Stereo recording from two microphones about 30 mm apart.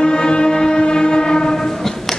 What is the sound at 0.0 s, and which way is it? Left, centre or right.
Train, left.